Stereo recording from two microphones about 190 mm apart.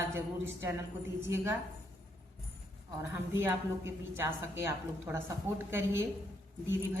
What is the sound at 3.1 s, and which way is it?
A woman's voice, 15° right (ahead or behind).